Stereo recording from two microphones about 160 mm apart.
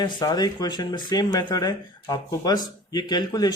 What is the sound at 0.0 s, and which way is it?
Speech, 25° left (ahead or behind).